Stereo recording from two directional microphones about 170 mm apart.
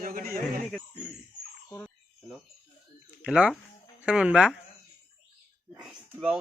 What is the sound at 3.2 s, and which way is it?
A woman's voice, 10° right (ahead or behind).